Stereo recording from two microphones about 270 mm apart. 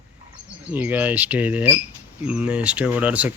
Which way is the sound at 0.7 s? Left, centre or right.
Centre.